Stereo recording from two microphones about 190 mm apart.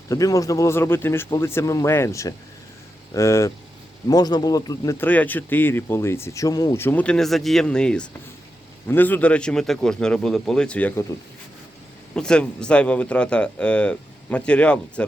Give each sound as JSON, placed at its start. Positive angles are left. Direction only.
{"t": 0.1, "sound": "speech", "side_deg": 15}
{"t": 12.1, "sound": "speech", "side_deg": 5}